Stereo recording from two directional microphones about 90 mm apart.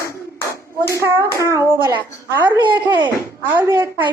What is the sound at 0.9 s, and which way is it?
Speech, 35° right (ahead or behind).